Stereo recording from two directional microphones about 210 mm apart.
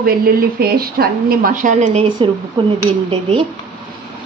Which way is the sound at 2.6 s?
20° right (ahead or behind).